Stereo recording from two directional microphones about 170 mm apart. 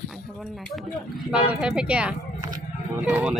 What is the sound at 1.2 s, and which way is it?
Speech, 5° right (ahead or behind).